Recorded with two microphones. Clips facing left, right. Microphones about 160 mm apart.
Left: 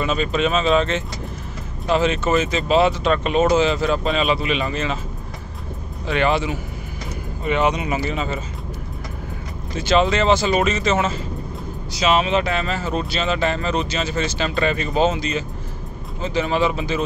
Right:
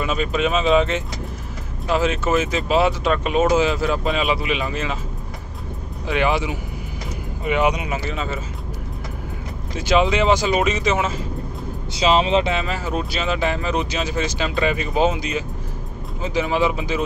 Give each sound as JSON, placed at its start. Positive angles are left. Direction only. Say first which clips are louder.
{"t": 0.0, "sound": "speech", "louder": "left 1 dB", "side_deg": -10}
{"t": 6.0, "sound": "speech", "louder": "left 1 dB", "side_deg": -10}
{"t": 7.9, "sound": "speech", "louder": "left 2 dB", "side_deg": 0}
{"t": 9.8, "sound": "speech", "louder": "even", "side_deg": -10}
{"t": 11.9, "sound": "speech", "louder": "right 1 dB", "side_deg": -25}
{"t": 12.6, "sound": "speech", "louder": "left 1 dB", "side_deg": -10}